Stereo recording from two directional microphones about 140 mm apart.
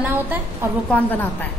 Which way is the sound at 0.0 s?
15° right (ahead or behind).